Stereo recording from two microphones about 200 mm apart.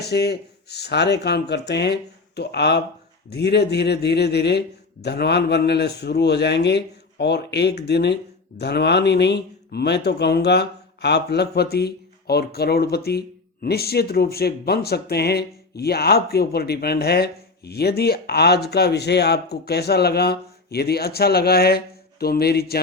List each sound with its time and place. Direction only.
0.0 s a man's voice: 55° left (ahead or behind)